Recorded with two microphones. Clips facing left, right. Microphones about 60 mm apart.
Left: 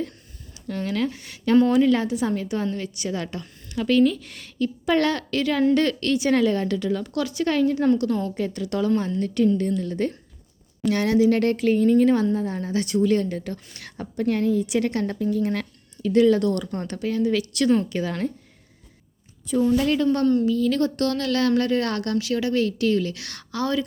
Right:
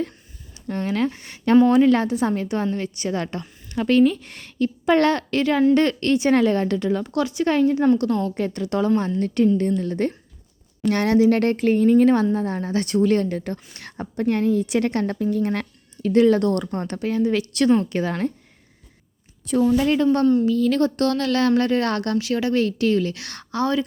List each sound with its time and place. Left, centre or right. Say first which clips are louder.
0.5 s speech: right 2 dB; right
7.9 s speech: right 2 dB; right
19.6 s a woman's voice: right 2 dB; right
20.4 s speech: right 2 dB; right